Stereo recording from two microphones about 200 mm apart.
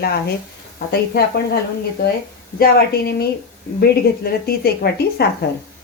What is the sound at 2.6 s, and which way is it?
A woman's voice, 50° left (ahead or behind).